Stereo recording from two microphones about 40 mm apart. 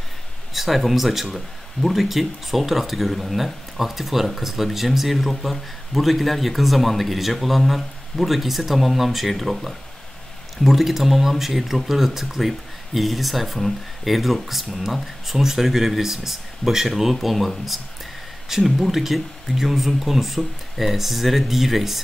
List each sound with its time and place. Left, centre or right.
0.5 s speech: centre